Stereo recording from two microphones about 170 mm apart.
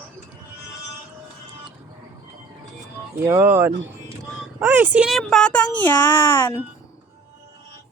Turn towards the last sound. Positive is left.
turn(degrees=10)  # may be behind; listen again after turning